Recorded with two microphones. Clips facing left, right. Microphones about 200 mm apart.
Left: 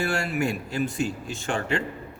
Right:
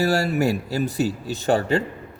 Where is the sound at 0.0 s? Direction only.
40° right (ahead or behind).